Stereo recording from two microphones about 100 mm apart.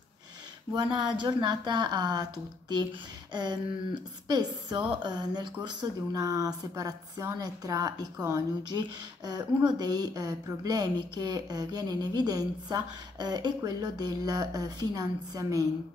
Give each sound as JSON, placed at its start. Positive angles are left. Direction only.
{"t": 0.9, "sound": "speech", "side_deg": -50}
{"t": 3.3, "sound": "speech", "side_deg": -45}